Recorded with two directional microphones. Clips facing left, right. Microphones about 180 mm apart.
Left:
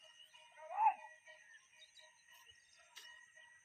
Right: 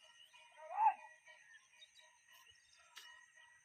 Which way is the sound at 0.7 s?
5° left (ahead or behind).